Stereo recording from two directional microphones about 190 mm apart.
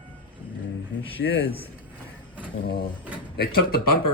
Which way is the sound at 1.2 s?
90° left.